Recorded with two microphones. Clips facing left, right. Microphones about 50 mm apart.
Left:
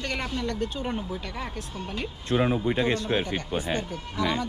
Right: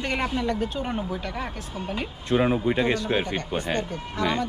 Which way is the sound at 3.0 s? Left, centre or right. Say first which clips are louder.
Right 2 dB; right.